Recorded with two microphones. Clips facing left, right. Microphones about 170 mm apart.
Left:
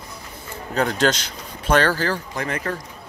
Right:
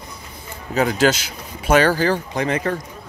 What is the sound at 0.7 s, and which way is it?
Speech, 5° right (ahead or behind).